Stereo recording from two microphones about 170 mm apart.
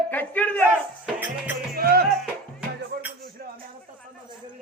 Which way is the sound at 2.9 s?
65° right (ahead or behind).